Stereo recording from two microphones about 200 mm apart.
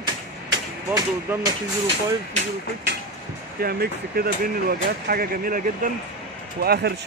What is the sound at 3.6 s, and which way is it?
A man's voice, 50° right (ahead or behind).